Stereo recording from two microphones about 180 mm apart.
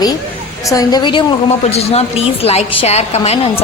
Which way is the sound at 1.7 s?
35° left (ahead or behind).